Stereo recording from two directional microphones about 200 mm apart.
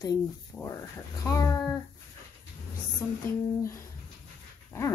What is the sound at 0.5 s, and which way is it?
Speech, 5° left (ahead or behind).